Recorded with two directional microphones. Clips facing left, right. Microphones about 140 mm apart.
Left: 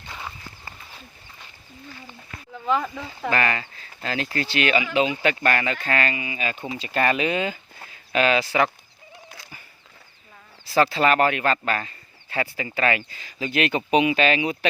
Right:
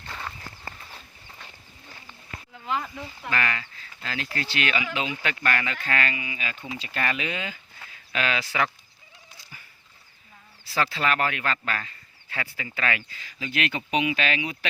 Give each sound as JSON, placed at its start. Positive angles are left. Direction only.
{"t": 0.1, "sound": "clip-clop", "side_deg": 10}
{"t": 3.2, "sound": "speech", "side_deg": 40}
{"t": 4.4, "sound": "speech", "side_deg": 20}
{"t": 10.8, "sound": "speech", "side_deg": 35}